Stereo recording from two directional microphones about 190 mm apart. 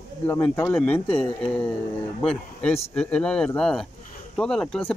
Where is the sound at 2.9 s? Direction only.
5° left (ahead or behind).